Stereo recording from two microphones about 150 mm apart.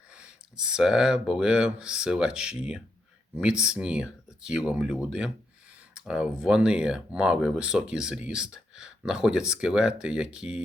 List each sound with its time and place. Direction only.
0.1 s speech: 5° right (ahead or behind)